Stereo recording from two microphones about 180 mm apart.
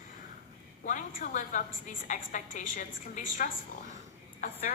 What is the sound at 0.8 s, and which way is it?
A woman's voice, 45° left (ahead or behind).